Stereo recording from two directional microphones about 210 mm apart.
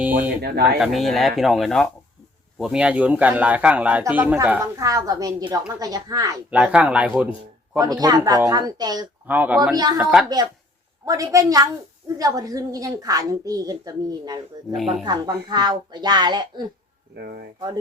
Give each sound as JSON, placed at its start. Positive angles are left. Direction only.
{"t": 0.0, "sound": "speech", "side_deg": -10}
{"t": 0.4, "sound": "speech", "side_deg": -50}
{"t": 0.8, "sound": "speech", "side_deg": 0}
{"t": 6.5, "sound": "speech", "side_deg": -5}
{"t": 7.8, "sound": "a child's voice", "side_deg": -20}
{"t": 9.2, "sound": "speech", "side_deg": -10}
{"t": 10.2, "sound": "speech", "side_deg": -20}
{"t": 14.8, "sound": "speech", "side_deg": 0}
{"t": 15.0, "sound": "a child's voice", "side_deg": -20}
{"t": 17.2, "sound": "speech", "side_deg": -50}